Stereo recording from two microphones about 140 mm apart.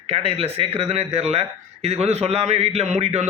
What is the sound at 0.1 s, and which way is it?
Speech, 45° right (ahead or behind).